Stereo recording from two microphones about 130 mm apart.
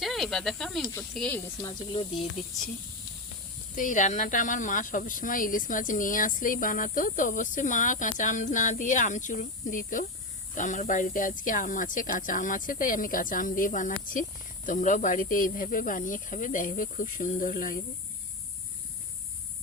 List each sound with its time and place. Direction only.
0.0 s speech: centre (ahead or behind)
2.4 s speech: 5° right (ahead or behind)
3.8 s speech: 80° left